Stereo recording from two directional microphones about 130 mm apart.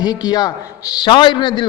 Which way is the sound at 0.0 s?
30° left (ahead or behind).